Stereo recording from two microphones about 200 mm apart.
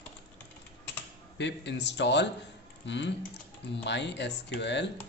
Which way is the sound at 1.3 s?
60° left (ahead or behind).